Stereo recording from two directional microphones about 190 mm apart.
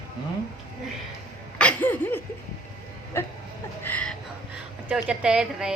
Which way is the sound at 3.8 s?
10° left (ahead or behind).